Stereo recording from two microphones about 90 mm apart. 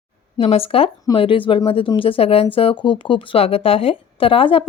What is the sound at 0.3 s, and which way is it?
Speech, 90° left.